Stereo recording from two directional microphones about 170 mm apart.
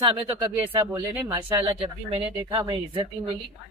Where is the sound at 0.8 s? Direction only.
20° right (ahead or behind).